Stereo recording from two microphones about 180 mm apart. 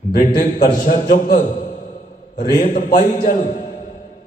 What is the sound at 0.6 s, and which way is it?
A man's voice, 45° left (ahead or behind).